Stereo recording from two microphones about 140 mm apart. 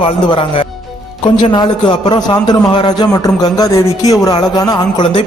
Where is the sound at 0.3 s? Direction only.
40° left (ahead or behind).